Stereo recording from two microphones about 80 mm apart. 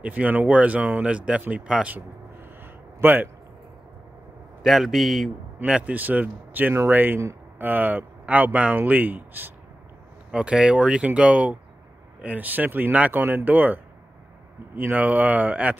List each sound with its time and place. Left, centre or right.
0.0 s speech: centre
2.6 s a sound: right
4.6 s a man's voice: centre
5.7 s speech: centre
10.3 s speech: centre
14.8 s speech: right